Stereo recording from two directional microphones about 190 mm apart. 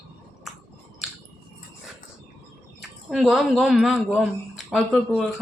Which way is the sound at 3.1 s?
Centre (ahead or behind).